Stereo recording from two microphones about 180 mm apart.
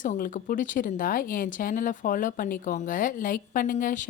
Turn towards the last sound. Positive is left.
turn(degrees=50)  # may be behind; listen again after turning